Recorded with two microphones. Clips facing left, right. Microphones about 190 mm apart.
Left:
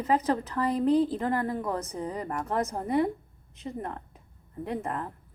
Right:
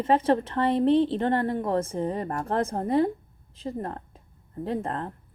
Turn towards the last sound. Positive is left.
turn(degrees=-30)  # may be behind; listen again after turning